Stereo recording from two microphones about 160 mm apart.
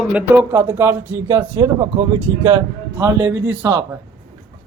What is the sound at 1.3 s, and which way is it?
Speech, 25° right (ahead or behind).